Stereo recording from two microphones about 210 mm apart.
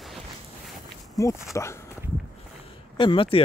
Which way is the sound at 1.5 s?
15° left (ahead or behind).